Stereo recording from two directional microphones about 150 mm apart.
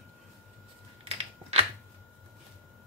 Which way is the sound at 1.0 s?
45° right (ahead or behind).